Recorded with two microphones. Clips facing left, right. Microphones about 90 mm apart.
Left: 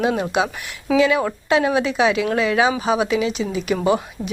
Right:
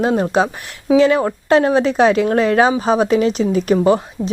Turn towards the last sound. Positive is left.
turn(degrees=-35)  # may be behind; listen again after turning